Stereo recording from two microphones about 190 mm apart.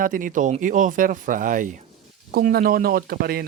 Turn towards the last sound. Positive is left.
turn(degrees=-55)  # may be behind; listen again after turning